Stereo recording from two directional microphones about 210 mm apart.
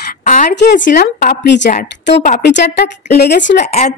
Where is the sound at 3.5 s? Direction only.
35° left (ahead or behind).